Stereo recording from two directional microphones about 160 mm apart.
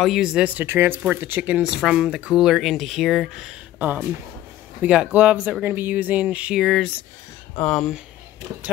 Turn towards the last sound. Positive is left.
turn(degrees=0)  # may be behind; listen again after turning